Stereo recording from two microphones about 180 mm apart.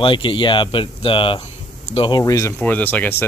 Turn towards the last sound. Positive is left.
turn(degrees=10)  # may be behind; listen again after turning